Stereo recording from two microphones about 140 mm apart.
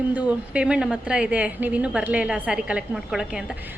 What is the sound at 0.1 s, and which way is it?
A woman's voice, 10° right (ahead or behind).